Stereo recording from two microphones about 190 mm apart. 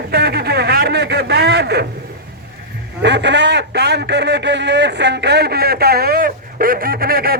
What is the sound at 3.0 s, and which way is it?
A man's voice, 65° right (ahead or behind).